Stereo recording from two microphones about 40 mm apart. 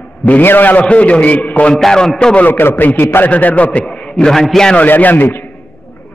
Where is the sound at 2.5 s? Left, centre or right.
Left.